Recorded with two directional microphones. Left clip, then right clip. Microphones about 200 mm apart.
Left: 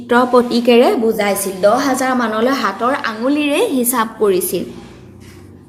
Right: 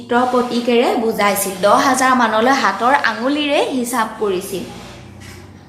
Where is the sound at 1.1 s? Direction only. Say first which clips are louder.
Even; 15° left (ahead or behind); by 4.6 s 45° left (ahead or behind).